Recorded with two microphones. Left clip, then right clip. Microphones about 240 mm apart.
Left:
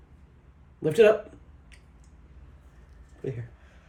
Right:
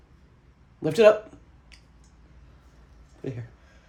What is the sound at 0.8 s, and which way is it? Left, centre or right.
Speech, right.